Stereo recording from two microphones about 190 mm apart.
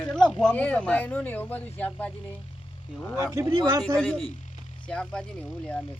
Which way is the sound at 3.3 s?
15° right (ahead or behind).